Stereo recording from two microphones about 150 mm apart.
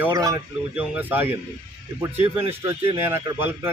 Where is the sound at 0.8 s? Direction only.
10° right (ahead or behind).